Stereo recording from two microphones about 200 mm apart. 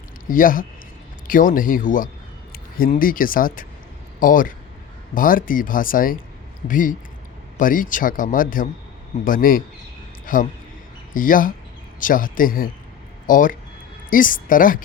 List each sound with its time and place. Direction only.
0.3 s speech: 45° left (ahead or behind)